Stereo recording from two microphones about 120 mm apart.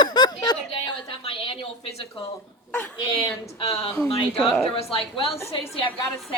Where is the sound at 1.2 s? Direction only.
50° left (ahead or behind).